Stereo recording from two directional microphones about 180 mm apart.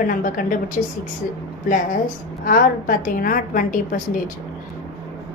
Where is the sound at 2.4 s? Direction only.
50° left (ahead or behind).